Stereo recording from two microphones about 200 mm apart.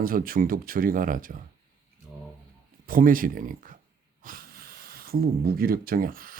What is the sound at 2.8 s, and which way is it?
Speech, 45° right (ahead or behind).